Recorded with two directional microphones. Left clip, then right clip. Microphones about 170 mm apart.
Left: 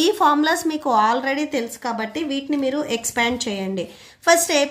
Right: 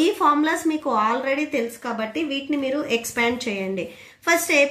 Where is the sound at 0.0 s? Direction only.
45° left (ahead or behind).